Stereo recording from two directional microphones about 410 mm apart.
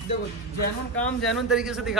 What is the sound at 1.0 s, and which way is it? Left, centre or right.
Speech, centre.